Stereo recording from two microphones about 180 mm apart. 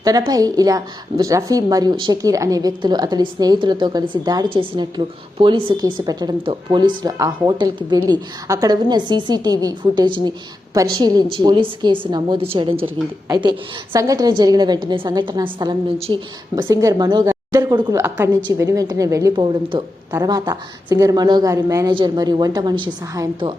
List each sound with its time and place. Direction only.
0.0 s a woman's voice: 20° right (ahead or behind)
16.6 s a woman's voice: 15° right (ahead or behind)